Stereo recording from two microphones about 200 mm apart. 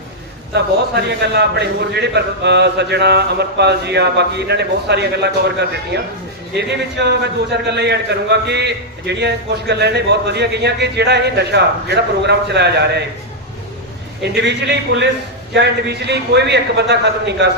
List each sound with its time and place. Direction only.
0.5 s a man's voice: 55° right (ahead or behind)
14.2 s a man's voice: 60° right (ahead or behind)